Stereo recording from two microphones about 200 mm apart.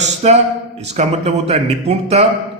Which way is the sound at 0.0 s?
35° right (ahead or behind).